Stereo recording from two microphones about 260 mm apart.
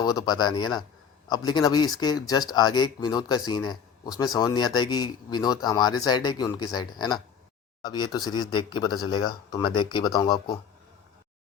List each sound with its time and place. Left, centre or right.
0.0 s a man's voice: centre